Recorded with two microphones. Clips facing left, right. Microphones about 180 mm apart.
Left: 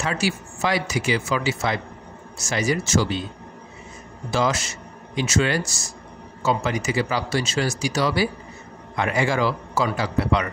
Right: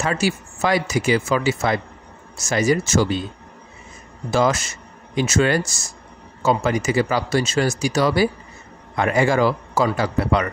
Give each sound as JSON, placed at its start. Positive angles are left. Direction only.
{"t": 0.0, "sound": "speech", "side_deg": -45}
{"t": 4.3, "sound": "a man's voice", "side_deg": -50}